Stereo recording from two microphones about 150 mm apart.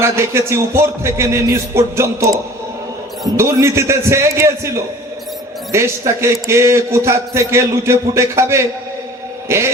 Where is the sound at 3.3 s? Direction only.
15° right (ahead or behind).